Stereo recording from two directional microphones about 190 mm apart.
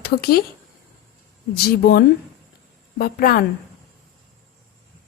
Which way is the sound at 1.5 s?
55° left (ahead or behind).